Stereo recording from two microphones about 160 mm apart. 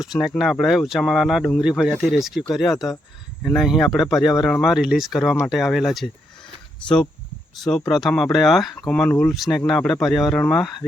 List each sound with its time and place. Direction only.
0.2 s speech: centre (ahead or behind)
2.7 s speech: 25° left (ahead or behind)
3.4 s speech: centre (ahead or behind)